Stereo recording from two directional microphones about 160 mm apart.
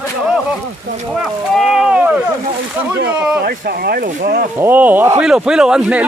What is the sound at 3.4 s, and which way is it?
Speech, 75° right (ahead or behind).